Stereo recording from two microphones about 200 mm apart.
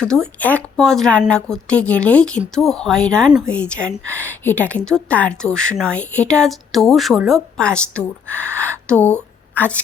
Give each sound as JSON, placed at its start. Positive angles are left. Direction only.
{"t": 0.0, "sound": "a woman's voice", "side_deg": 5}